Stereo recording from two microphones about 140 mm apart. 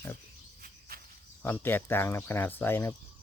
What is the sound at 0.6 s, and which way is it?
Cricket, 90° right.